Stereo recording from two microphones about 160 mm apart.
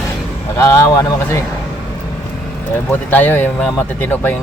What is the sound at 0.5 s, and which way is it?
Speech, 15° left (ahead or behind).